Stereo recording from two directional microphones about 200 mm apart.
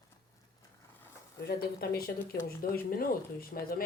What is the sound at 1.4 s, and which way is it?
Speech, 50° left (ahead or behind).